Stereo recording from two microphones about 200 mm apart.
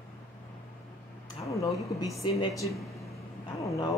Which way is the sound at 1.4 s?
15° left (ahead or behind).